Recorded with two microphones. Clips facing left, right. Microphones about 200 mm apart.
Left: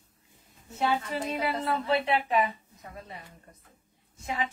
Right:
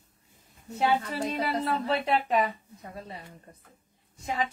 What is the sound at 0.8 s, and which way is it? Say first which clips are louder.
Speech: right 2 dB; 35° right (ahead or behind).